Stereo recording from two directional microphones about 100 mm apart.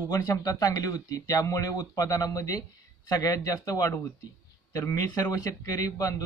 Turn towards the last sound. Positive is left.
turn(degrees=35)  # may be behind; listen again after turning